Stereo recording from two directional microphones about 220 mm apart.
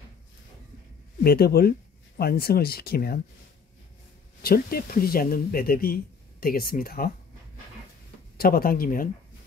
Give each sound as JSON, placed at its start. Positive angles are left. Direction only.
{"t": 1.2, "sound": "speech", "side_deg": 45}
{"t": 4.4, "sound": "speech", "side_deg": 45}
{"t": 8.4, "sound": "speech", "side_deg": 45}